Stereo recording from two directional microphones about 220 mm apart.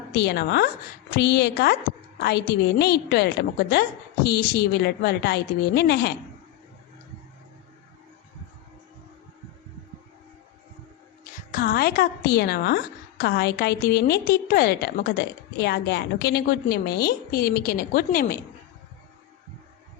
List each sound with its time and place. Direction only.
0.1 s a woman's voice: 50° left (ahead or behind)
11.2 s a woman's voice: 40° left (ahead or behind)